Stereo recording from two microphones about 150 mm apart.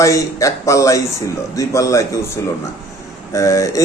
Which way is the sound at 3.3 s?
20° left (ahead or behind).